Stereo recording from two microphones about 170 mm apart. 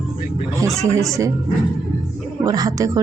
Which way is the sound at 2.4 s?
20° right (ahead or behind).